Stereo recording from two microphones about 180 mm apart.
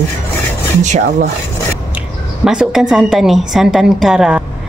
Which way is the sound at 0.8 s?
40° right (ahead or behind).